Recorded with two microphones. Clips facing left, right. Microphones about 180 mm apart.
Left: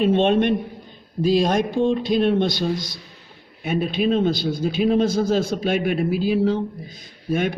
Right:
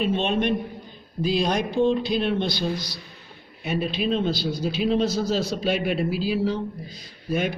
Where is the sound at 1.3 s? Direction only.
50° left (ahead or behind).